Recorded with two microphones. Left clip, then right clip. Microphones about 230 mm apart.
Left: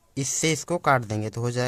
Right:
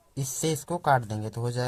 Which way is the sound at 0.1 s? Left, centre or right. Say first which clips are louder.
Left 5 dB; left.